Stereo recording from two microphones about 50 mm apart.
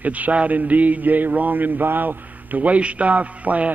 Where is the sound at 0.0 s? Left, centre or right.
Right.